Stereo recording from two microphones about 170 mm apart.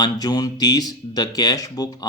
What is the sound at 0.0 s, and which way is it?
Speech, 25° left (ahead or behind).